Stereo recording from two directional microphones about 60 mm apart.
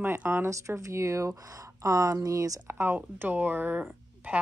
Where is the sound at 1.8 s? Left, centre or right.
Right.